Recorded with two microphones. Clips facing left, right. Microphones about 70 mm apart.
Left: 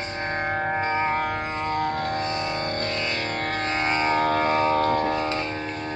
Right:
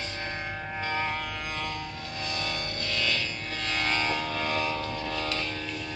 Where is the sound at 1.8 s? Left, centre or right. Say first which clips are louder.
Left 12 dB; left.